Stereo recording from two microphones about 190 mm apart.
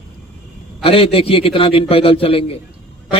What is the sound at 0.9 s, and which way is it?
A man's voice, 30° left (ahead or behind).